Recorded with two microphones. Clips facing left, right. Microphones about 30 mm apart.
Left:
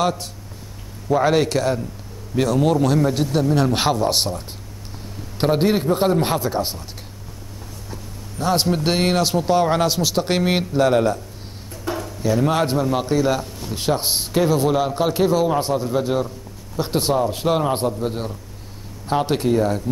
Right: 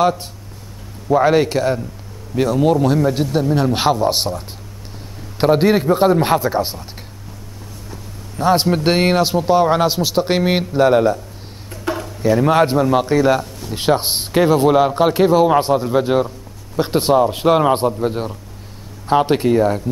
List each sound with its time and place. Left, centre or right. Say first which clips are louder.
0.0 s a man's voice: right 5 dB; centre
8.4 s a man's voice: right 5 dB; centre
17.7 s a man's voice: right 4 dB; centre